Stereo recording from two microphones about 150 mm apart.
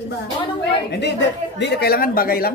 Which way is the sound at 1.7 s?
90° left.